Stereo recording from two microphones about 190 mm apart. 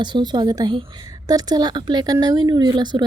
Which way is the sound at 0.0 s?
25° right (ahead or behind).